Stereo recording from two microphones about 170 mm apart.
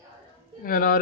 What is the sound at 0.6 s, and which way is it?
Speech, 55° left (ahead or behind).